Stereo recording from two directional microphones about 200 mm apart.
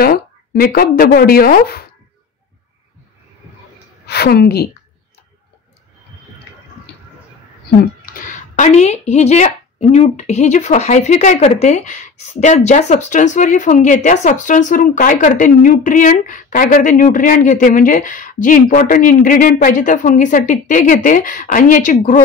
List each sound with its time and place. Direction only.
0.0 s speech: 45° left (ahead or behind)
4.0 s a woman's voice: 55° left (ahead or behind)
8.0 s speech: 40° left (ahead or behind)